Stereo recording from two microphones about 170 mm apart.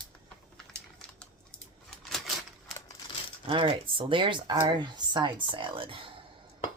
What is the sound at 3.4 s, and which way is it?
Speech, 30° right (ahead or behind).